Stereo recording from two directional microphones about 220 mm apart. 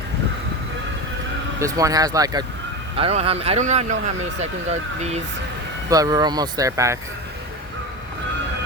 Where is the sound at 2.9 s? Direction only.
25° right (ahead or behind).